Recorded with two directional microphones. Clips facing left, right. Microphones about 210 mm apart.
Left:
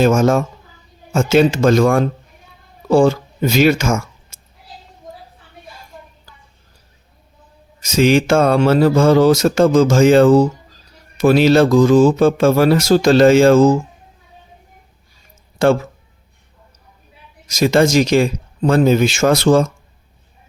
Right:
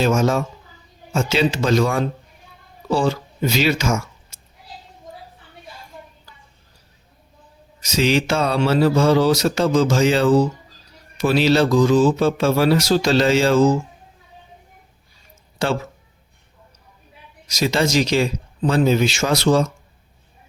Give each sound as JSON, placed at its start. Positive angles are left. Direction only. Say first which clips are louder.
{"t": 0.0, "sound": "speech", "louder": "left 5 dB", "side_deg": 50}
{"t": 7.8, "sound": "speech", "louder": "left 5 dB", "side_deg": 50}
{"t": 15.5, "sound": "speech", "louder": "left 8 dB", "side_deg": 50}
{"t": 17.5, "sound": "speech", "louder": "left 6 dB", "side_deg": 50}